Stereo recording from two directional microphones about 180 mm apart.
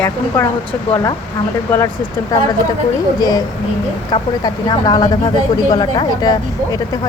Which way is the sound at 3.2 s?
20° left (ahead or behind).